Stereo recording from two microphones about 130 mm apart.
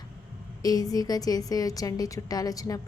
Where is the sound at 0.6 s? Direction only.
30° left (ahead or behind).